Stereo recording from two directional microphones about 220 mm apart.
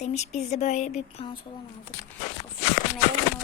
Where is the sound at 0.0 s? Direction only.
30° left (ahead or behind).